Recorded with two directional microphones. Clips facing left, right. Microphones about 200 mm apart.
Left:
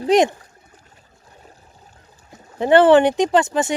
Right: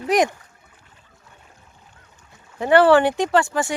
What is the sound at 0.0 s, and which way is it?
Speech, 25° left (ahead or behind).